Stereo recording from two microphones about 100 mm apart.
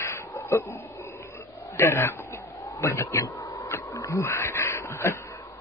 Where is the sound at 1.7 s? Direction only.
25° left (ahead or behind).